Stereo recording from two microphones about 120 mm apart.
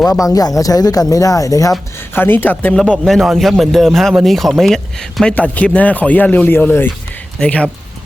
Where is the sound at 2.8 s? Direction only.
5° left (ahead or behind).